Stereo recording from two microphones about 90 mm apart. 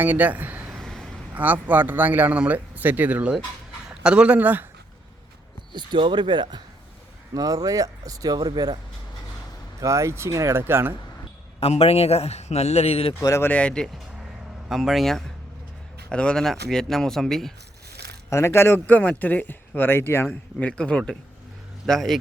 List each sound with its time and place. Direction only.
0.0 s a man's voice: 20° right (ahead or behind)
0.7 s vehicle: centre (ahead or behind)
1.3 s speech: 20° right (ahead or behind)
5.7 s speech: 60° right (ahead or behind)
7.3 s speech: 45° right (ahead or behind)
9.8 s speech: 35° right (ahead or behind)
11.6 s a man's voice: 90° left
13.4 s speech: 15° left (ahead or behind)
14.7 s speech: centre (ahead or behind)
18.3 s speech: 30° left (ahead or behind)
20.6 s speech: 10° left (ahead or behind)